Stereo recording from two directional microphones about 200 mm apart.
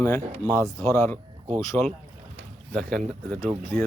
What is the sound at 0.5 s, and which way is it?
Speech, 15° left (ahead or behind).